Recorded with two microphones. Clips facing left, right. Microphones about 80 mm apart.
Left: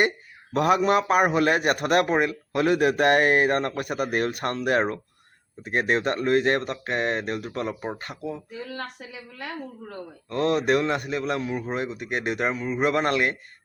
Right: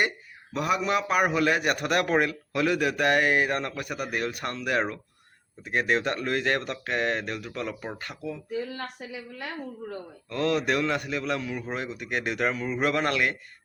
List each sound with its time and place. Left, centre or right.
0.5 s speech: left
2.0 s speech: centre
2.5 s speech: left
10.2 s speech: left
12.5 s speech: centre
12.9 s speech: left